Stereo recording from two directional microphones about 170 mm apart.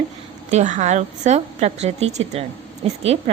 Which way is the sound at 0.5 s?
45° right (ahead or behind).